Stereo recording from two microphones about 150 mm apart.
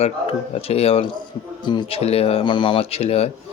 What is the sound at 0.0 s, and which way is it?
Speech, 40° left (ahead or behind).